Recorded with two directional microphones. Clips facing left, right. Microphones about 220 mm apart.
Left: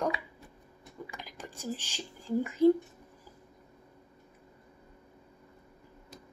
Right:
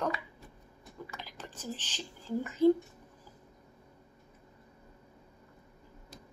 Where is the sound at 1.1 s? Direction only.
10° left (ahead or behind).